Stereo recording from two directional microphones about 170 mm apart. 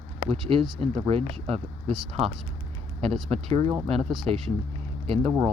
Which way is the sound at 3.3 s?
35° right (ahead or behind).